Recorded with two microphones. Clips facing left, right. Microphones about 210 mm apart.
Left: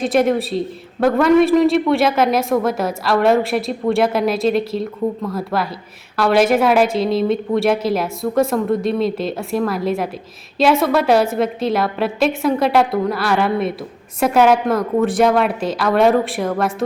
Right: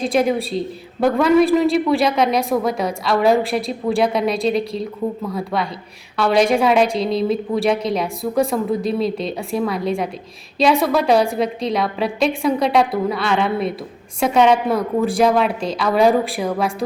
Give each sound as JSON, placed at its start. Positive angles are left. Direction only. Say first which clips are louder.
{"t": 0.0, "sound": "a woman's voice", "louder": "left 2 dB", "side_deg": 0}